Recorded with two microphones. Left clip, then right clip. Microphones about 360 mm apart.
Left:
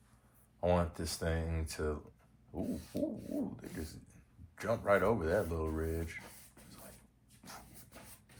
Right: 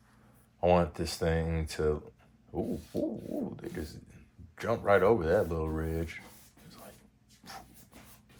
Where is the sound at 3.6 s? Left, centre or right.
Right.